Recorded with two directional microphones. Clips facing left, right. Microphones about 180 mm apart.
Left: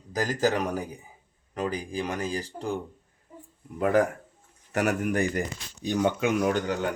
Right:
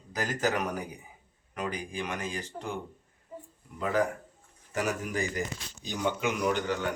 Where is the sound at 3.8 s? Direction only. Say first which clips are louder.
Left 5 dB; 55° left (ahead or behind).